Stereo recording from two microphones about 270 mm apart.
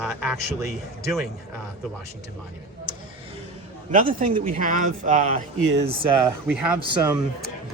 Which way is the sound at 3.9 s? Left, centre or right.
Right.